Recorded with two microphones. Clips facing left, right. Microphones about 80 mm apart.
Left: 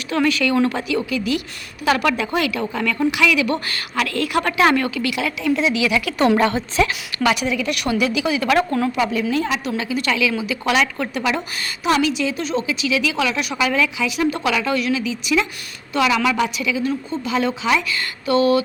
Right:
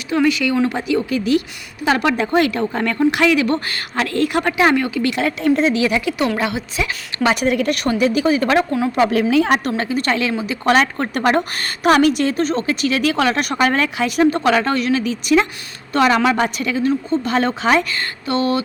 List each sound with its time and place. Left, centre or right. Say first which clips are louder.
0.1 s a woman's voice: right 2 dB; centre; by 4.4 s right
4.4 s speech: left 2 dB; centre
5.0 s a woman's voice: right 4 dB; right
6.3 s a woman's voice: left 4 dB; centre
7.2 s a woman's voice: right 1 dB; right
7.4 s a woman's voice: right 4 dB; right
8.5 s a woman's voice: right 1 dB; centre
9.5 s a woman's voice: right 5 dB; right
11.1 s a woman's voice: right 5 dB; right